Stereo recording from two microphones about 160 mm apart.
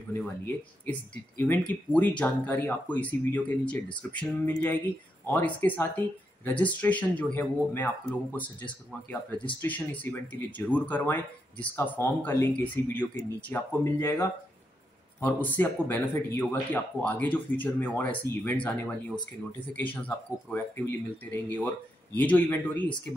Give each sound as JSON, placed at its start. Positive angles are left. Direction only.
{"t": 0.8, "sound": "speech", "side_deg": 15}